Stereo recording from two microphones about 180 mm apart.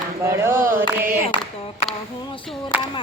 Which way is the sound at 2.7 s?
10° right (ahead or behind).